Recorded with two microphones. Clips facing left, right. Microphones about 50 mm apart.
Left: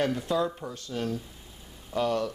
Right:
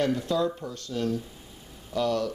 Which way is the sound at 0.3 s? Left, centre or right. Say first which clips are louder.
Right 1 dB; centre.